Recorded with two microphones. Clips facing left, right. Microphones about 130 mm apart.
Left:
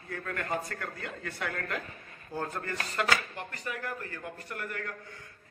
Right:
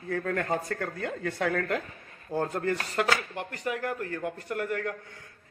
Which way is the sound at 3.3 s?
65° right (ahead or behind).